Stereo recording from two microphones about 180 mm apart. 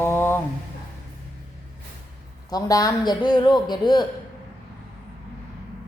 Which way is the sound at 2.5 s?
20° left (ahead or behind).